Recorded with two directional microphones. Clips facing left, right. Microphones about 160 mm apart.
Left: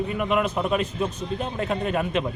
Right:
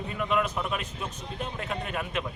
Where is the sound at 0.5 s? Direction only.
30° left (ahead or behind).